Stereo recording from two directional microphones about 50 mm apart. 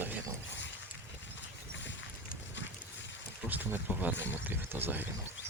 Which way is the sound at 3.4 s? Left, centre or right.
Right.